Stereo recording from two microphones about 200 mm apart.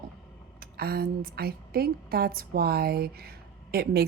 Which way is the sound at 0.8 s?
50° right (ahead or behind).